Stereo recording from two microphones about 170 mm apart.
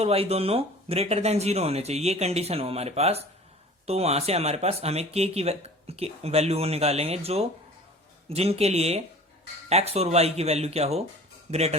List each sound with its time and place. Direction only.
0.0 s speech: 35° right (ahead or behind)